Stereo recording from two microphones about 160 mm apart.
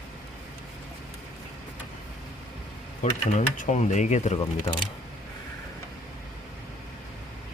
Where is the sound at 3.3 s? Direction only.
50° left (ahead or behind).